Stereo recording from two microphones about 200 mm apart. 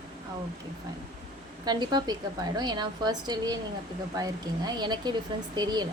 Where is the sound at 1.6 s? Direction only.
20° right (ahead or behind).